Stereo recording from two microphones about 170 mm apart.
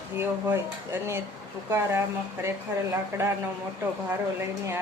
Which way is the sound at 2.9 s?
15° right (ahead or behind).